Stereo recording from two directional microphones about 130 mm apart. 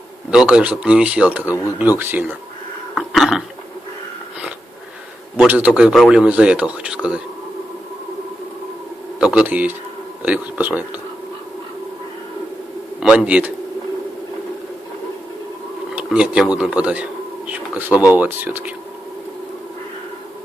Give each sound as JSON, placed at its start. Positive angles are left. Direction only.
{"t": 0.3, "sound": "a man's voice", "side_deg": -5}
{"t": 2.9, "sound": "a sound", "side_deg": 0}
{"t": 5.5, "sound": "a man's voice", "side_deg": -10}
{"t": 9.2, "sound": "a man's voice", "side_deg": -10}
{"t": 13.0, "sound": "a man's voice", "side_deg": -10}
{"t": 16.0, "sound": "a man's voice", "side_deg": -10}